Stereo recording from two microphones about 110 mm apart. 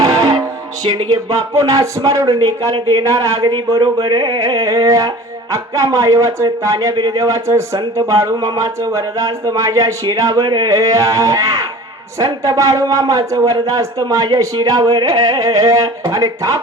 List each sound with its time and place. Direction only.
0.0 s music: 35° right (ahead or behind)
0.9 s speech: 35° right (ahead or behind)
3.8 s a sound: 50° right (ahead or behind)
4.4 s speech: 30° right (ahead or behind)
10.4 s a sound: 45° right (ahead or behind)
10.7 s a man's voice: 30° right (ahead or behind)